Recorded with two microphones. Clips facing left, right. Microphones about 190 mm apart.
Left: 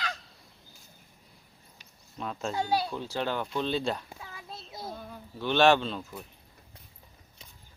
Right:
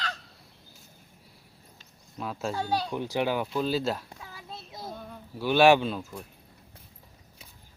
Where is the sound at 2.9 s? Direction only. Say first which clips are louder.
Right 4 dB; 15° right (ahead or behind); by 5.2 s centre (ahead or behind).